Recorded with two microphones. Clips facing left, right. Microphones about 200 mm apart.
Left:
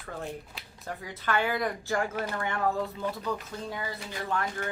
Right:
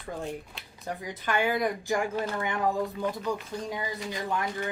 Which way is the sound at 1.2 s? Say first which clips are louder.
Right 2 dB; 15° right (ahead or behind).